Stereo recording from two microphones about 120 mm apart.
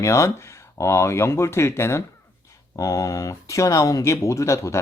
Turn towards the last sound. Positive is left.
turn(degrees=25)  # may be behind; listen again after turning